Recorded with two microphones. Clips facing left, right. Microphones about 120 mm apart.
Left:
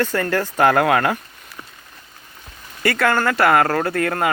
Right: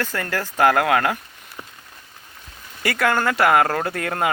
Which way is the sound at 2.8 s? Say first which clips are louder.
Left 2 dB; 15° right (ahead or behind).